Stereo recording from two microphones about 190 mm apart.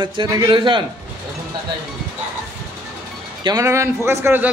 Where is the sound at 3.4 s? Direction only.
20° right (ahead or behind).